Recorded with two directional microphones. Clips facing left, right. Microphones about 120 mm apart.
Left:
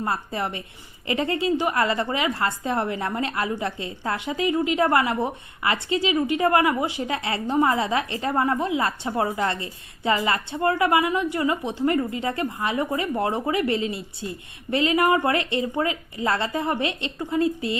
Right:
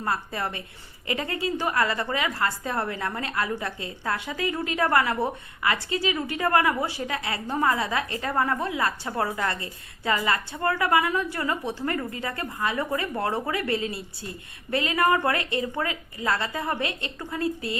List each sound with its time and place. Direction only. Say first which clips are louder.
0.0 s a woman's voice: left 2 dB; 25° left (ahead or behind)